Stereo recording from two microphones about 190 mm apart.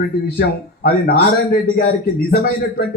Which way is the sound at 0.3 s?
55° left (ahead or behind).